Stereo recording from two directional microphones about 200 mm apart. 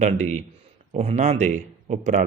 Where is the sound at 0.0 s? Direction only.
35° right (ahead or behind).